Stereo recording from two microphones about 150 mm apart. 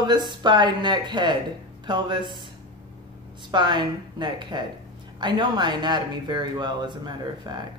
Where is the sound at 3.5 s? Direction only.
30° right (ahead or behind).